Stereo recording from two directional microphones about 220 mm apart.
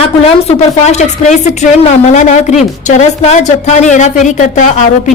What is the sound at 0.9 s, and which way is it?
Speech, 30° left (ahead or behind).